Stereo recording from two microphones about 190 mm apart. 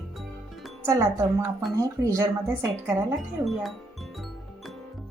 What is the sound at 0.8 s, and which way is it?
A woman's voice, 15° right (ahead or behind).